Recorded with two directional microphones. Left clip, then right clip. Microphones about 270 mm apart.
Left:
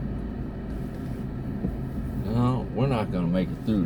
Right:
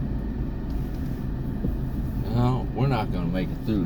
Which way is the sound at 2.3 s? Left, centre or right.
Centre.